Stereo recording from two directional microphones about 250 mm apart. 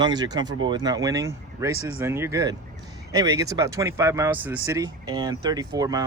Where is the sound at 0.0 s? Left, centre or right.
Centre.